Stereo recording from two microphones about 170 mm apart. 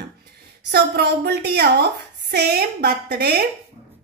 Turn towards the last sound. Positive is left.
turn(degrees=-70)  # may be behind; listen again after turning